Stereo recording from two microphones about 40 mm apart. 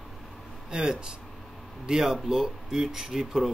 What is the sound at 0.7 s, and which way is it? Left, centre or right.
Speech, centre.